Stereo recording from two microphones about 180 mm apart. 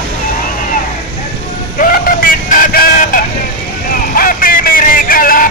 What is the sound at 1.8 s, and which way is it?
Vehicle, 50° left (ahead or behind).